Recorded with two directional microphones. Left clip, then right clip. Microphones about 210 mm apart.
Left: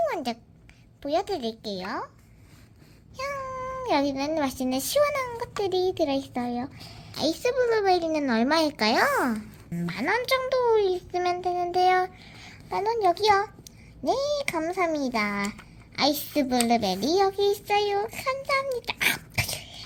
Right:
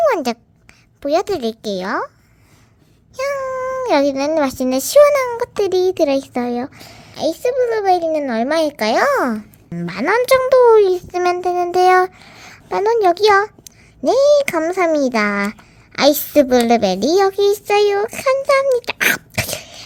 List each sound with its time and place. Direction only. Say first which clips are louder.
0.0 s a sound: right 12 dB; 45° right (ahead or behind)
1.0 s a woman's voice: right 10 dB; 45° right (ahead or behind)
3.2 s a woman's voice: right 11 dB; 45° right (ahead or behind)
7.1 s a woman's voice: right 8 dB; 25° right (ahead or behind); by 19.8 s 45° right (ahead or behind)